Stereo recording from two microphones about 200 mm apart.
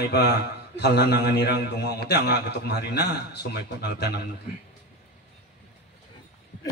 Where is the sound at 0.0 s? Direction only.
55° left (ahead or behind).